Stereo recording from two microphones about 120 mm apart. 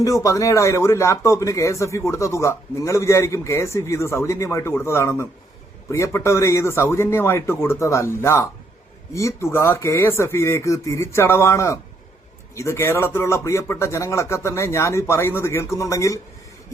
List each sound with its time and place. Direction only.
0.0 s speech: 25° left (ahead or behind)